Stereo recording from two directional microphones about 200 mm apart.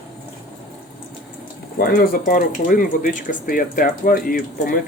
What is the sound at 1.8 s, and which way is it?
Speech, 45° left (ahead or behind).